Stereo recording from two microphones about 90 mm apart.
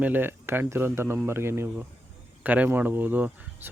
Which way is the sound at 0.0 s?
20° right (ahead or behind).